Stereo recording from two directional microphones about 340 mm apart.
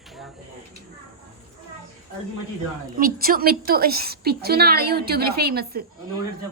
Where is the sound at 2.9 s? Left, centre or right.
Right.